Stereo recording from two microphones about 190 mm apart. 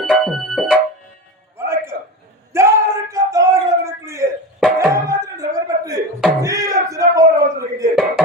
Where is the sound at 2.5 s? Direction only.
15° right (ahead or behind).